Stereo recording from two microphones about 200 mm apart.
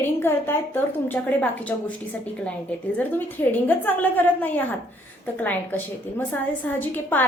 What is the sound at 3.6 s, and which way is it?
A woman's voice, 10° left (ahead or behind).